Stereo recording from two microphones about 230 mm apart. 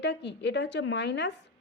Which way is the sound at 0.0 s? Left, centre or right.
Left.